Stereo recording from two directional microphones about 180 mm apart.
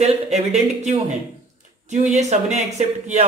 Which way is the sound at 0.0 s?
35° right (ahead or behind).